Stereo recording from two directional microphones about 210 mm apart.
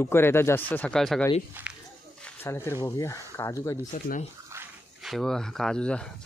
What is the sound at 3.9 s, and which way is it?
Speech, 40° left (ahead or behind).